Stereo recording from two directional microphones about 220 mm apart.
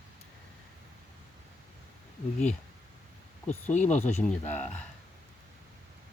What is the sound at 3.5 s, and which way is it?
Speech, 30° left (ahead or behind).